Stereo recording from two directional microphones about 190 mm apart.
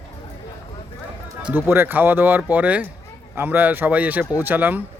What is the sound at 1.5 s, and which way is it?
Speech, 10° right (ahead or behind).